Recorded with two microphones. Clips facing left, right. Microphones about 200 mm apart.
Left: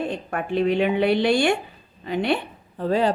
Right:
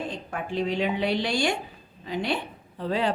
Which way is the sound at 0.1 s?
60° left (ahead or behind).